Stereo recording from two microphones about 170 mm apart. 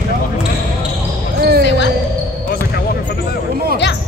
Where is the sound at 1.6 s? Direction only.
90° left.